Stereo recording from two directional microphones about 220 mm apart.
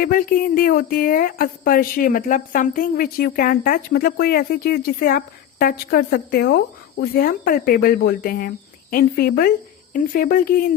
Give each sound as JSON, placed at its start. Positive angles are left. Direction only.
{"t": 0.0, "sound": "speech", "side_deg": 40}